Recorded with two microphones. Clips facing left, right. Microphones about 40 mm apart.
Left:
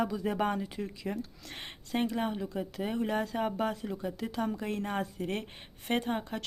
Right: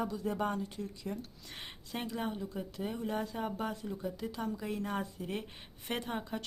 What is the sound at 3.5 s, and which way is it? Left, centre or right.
Speech, left.